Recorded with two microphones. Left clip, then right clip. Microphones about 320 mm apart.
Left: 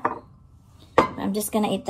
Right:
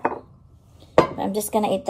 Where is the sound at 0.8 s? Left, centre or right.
Centre.